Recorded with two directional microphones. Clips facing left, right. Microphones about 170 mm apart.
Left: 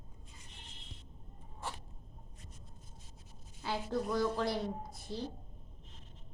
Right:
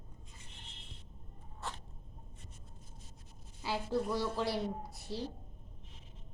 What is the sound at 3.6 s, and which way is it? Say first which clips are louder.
A woman's voice: right 1 dB; 5° right (ahead or behind).